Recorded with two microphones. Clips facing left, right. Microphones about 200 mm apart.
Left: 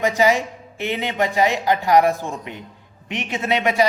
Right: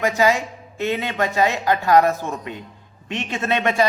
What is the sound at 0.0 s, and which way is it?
A man's voice, 15° left (ahead or behind).